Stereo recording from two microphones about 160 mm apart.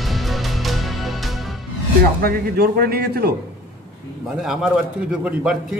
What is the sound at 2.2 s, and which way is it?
A man's voice, 70° right (ahead or behind).